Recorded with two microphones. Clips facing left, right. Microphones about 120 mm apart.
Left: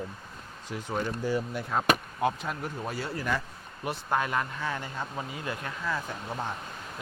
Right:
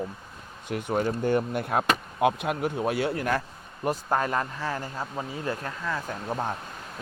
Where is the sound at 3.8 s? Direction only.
40° right (ahead or behind).